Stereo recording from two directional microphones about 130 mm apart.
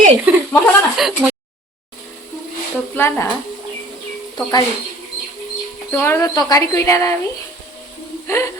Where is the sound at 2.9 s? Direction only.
15° left (ahead or behind).